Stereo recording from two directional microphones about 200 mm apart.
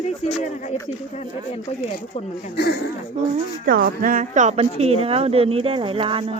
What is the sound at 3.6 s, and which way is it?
A woman's voice, 45° right (ahead or behind).